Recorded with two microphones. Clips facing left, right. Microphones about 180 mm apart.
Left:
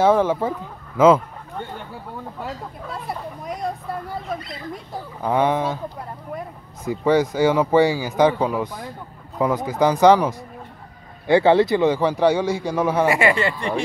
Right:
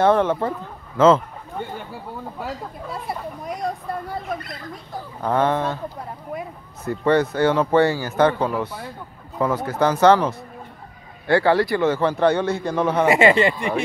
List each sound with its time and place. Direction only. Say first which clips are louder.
0.0 s speech: even; 5° left (ahead or behind)
2.4 s speech: right 2 dB; centre (ahead or behind)
5.2 s speech: even; 10° left (ahead or behind)
6.8 s speech: even; 10° left (ahead or behind)
13.0 s speech: right 5 dB; 20° right (ahead or behind)